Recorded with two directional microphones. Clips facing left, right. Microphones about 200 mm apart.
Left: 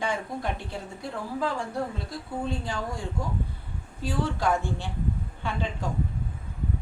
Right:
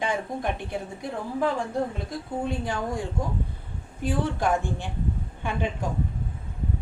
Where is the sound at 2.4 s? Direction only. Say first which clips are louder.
Right 3 dB; 20° right (ahead or behind).